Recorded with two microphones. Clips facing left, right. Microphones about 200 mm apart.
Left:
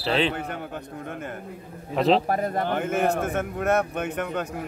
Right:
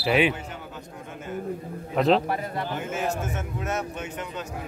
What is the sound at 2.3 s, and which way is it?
A man's voice, 45° left (ahead or behind).